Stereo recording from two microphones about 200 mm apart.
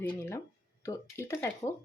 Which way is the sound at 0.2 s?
10° left (ahead or behind).